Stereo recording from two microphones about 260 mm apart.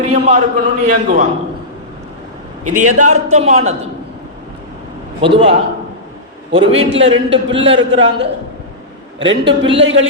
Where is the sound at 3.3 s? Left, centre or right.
Right.